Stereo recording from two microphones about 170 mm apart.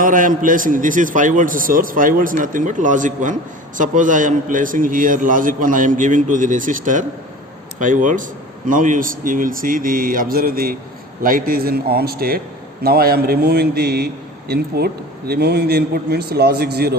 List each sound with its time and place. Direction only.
0.0 s a man's voice: 55° right (ahead or behind); by 17.0 s 70° right (ahead or behind)